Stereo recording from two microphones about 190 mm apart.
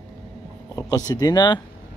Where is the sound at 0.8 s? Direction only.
20° left (ahead or behind).